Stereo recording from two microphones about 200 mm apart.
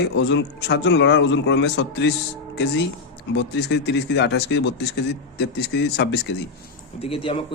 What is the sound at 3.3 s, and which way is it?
Speech, 60° left (ahead or behind).